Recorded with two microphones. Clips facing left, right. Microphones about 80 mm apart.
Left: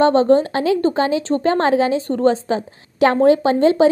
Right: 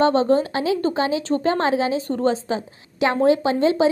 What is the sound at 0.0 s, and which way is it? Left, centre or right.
A woman's voice, left.